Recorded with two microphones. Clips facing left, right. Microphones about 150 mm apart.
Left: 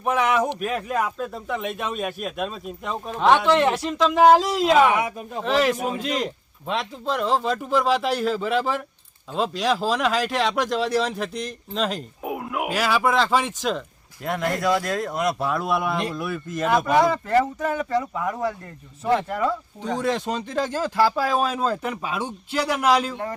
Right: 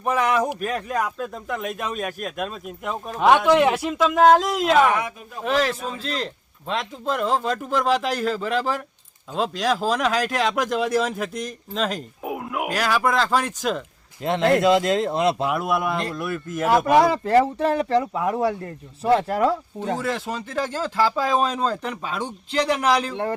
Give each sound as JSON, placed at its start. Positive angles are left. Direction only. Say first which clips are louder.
{"t": 0.0, "sound": "speech", "louder": "even", "side_deg": 0}
{"t": 14.2, "sound": "speech", "louder": "right 6 dB", "side_deg": -25}
{"t": 15.6, "sound": "speech", "louder": "even", "side_deg": 0}
{"t": 17.0, "sound": "speech", "louder": "right 2 dB", "side_deg": -30}
{"t": 19.3, "sound": "speech", "louder": "right 4 dB", "side_deg": -85}
{"t": 20.0, "sound": "speech", "louder": "left 2 dB", "side_deg": 20}